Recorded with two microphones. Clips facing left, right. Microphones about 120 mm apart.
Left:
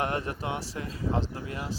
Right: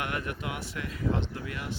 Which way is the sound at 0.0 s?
30° left (ahead or behind).